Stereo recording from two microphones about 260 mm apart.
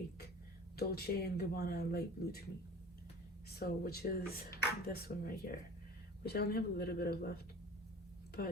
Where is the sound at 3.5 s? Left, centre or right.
Left.